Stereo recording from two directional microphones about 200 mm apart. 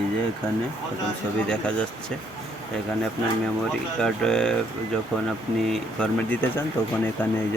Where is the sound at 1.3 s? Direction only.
5° left (ahead or behind).